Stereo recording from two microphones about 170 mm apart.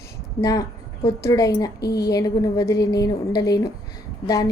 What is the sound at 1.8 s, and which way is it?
Speech, 70° left (ahead or behind).